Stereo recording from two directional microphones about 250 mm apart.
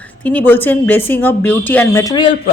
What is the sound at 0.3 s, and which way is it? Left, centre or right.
Speech, centre.